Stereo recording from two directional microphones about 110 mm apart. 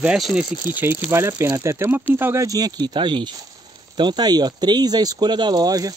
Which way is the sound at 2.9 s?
45° right (ahead or behind).